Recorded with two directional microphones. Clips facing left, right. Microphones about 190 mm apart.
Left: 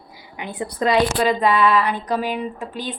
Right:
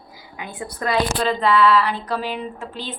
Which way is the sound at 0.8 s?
15° left (ahead or behind).